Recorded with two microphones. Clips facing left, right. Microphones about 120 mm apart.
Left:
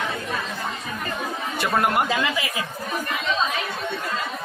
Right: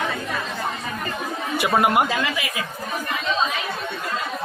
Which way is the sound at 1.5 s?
5° right (ahead or behind).